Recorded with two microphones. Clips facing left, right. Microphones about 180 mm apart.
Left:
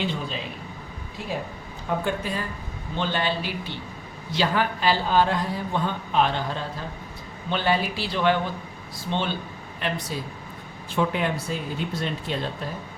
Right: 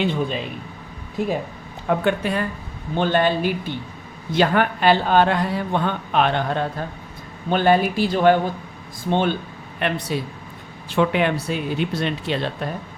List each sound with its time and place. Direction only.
0.0 s a man's voice: 55° right (ahead or behind)
2.0 s a man's voice: 65° right (ahead or behind)
2.9 s a man's voice: 50° right (ahead or behind)
9.8 s a man's voice: 65° right (ahead or behind)
10.8 s speech: 75° right (ahead or behind)